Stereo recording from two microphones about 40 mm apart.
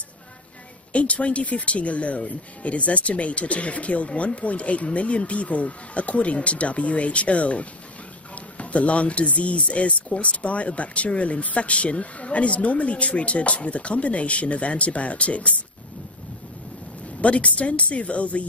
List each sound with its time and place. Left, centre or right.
0.9 s speech: left
17.2 s speech: left